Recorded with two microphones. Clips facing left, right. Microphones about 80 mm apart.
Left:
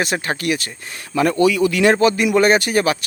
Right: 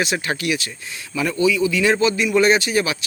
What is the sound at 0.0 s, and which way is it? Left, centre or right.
Speech, left.